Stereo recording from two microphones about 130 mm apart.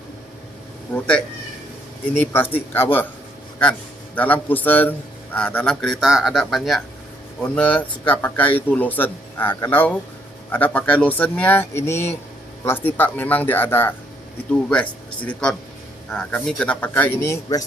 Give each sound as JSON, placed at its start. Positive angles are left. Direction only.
{"t": 0.9, "sound": "a man's voice", "side_deg": 15}
{"t": 2.1, "sound": "a man's voice", "side_deg": 15}